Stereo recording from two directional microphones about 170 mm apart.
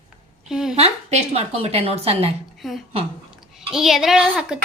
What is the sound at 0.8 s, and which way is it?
A woman's voice, 35° right (ahead or behind).